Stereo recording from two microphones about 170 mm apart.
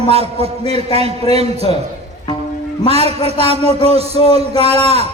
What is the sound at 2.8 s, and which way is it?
A man's voice, 35° right (ahead or behind).